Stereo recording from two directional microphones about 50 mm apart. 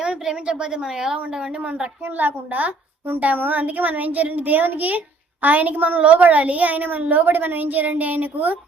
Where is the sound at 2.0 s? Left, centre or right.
Right.